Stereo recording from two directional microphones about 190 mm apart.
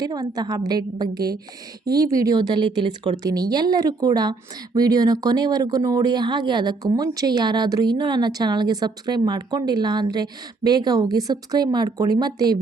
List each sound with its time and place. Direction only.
0.0 s speech: 20° right (ahead or behind)